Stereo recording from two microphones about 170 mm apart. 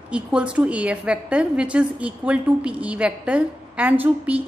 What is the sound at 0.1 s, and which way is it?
A woman's voice, 5° right (ahead or behind).